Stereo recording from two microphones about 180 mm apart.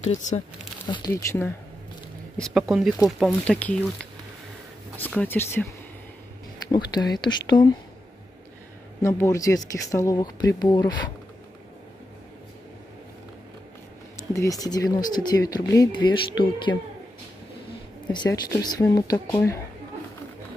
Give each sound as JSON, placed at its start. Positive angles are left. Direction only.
{"t": 0.0, "sound": "speech", "side_deg": 40}
{"t": 0.8, "sound": "speech", "side_deg": 20}
{"t": 2.3, "sound": "speech", "side_deg": 0}
{"t": 4.9, "sound": "speech", "side_deg": 10}
{"t": 6.7, "sound": "speech", "side_deg": 25}
{"t": 9.0, "sound": "speech", "side_deg": 15}
{"t": 14.3, "sound": "speech", "side_deg": 20}
{"t": 18.1, "sound": "speech", "side_deg": 20}